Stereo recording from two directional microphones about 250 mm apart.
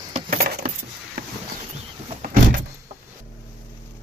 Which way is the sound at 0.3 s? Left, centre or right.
Right.